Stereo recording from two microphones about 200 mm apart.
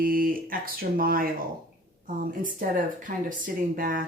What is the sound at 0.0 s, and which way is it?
Speech, 45° right (ahead or behind).